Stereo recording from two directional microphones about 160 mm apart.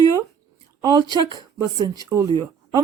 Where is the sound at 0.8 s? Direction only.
25° right (ahead or behind).